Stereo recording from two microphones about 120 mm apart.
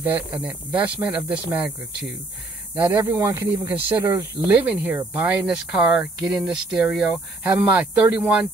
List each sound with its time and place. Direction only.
0.4 s speech: 15° right (ahead or behind)
2.8 s speech: 20° right (ahead or behind)